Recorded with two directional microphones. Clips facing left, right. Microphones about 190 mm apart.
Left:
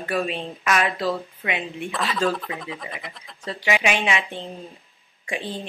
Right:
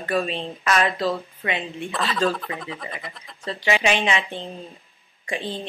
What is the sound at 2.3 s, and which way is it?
Speech, centre (ahead or behind).